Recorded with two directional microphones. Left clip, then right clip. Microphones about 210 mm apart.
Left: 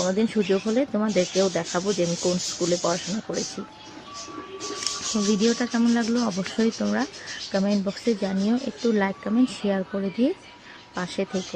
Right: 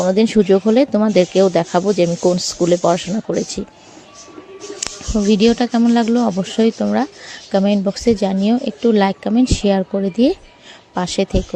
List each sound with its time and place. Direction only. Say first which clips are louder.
0.0 s speech: right 9 dB; 30° right (ahead or behind)
5.1 s speech: right 10 dB; 35° right (ahead or behind)